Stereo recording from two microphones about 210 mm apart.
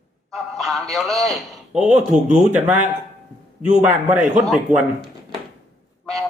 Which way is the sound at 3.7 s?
35° right (ahead or behind).